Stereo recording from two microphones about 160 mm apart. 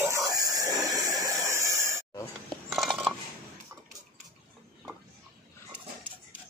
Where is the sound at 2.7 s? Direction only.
Centre (ahead or behind).